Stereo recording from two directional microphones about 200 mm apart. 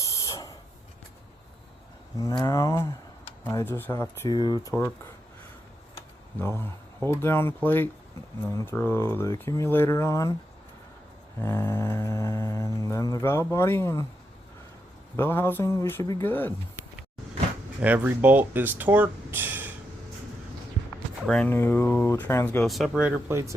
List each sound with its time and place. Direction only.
0.0 s spray: 15° left (ahead or behind)
2.1 s speech: 20° left (ahead or behind)
7.1 s speech: 10° left (ahead or behind)
11.3 s speech: 10° left (ahead or behind)
15.1 s speech: 10° left (ahead or behind)
17.8 s speech: 10° right (ahead or behind)
21.2 s speech: 5° left (ahead or behind)
22.6 s speech: centre (ahead or behind)